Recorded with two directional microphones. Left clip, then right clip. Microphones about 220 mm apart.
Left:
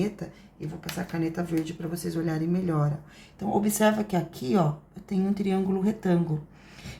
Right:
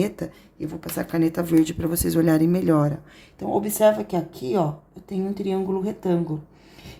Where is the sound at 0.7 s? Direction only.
50° right (ahead or behind).